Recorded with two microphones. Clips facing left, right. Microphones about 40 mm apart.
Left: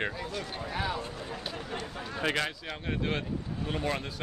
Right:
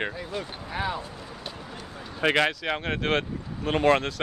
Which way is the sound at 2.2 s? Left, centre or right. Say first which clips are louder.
Right 8 dB; right.